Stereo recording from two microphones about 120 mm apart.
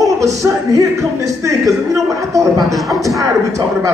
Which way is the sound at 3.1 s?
25° right (ahead or behind).